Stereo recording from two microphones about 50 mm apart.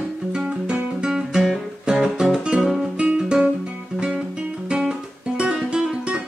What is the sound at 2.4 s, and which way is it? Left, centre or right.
Guitar, centre.